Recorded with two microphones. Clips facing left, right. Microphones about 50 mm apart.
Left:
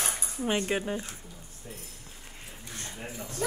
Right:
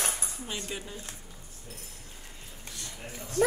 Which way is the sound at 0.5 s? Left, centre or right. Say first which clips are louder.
Left 11 dB; left.